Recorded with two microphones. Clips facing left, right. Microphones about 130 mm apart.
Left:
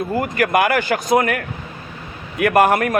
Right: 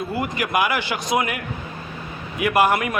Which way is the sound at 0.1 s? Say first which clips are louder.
Left 6 dB; 50° left (ahead or behind).